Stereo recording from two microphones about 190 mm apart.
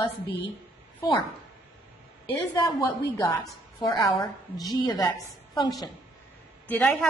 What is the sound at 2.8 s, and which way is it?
Speech, 15° left (ahead or behind).